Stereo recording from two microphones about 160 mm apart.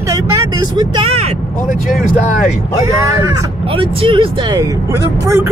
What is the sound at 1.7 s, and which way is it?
Speech, 55° left (ahead or behind).